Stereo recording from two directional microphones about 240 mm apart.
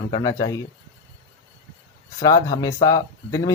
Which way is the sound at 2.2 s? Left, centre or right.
Centre.